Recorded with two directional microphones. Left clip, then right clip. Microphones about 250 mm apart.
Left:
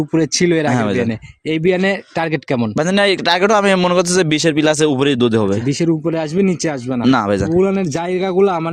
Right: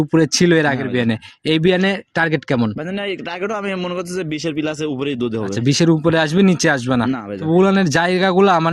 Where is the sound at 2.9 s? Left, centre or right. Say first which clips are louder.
Left 13 dB; left.